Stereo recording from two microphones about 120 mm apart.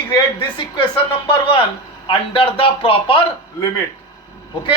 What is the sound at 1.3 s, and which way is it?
Speech, 45° left (ahead or behind).